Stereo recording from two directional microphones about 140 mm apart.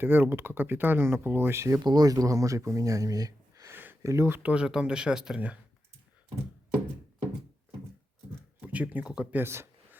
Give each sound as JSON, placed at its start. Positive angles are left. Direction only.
{"t": 0.0, "sound": "speech", "side_deg": -15}
{"t": 8.6, "sound": "speech", "side_deg": -10}